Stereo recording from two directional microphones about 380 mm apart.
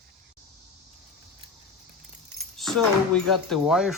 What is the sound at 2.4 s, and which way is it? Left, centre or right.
Keys jangling, centre.